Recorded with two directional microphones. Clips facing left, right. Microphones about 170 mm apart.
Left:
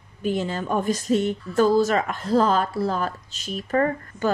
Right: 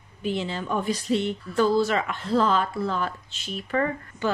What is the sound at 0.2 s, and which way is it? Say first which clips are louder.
Speech: left 3 dB; 45° left (ahead or behind).